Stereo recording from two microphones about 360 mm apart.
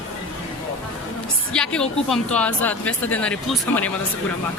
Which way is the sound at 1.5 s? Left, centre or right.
Centre.